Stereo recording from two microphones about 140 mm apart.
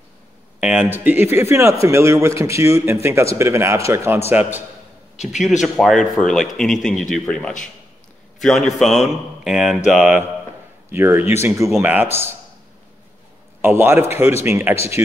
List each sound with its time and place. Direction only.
0.6 s a man's voice: 5° right (ahead or behind)
5.6 s a man's voice: centre (ahead or behind)
10.9 s a man's voice: 15° right (ahead or behind)
13.6 s a man's voice: 15° right (ahead or behind)